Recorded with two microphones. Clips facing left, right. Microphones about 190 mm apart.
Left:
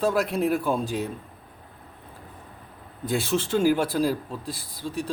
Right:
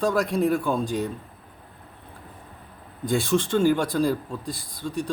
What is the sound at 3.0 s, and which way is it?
Speech, 5° left (ahead or behind).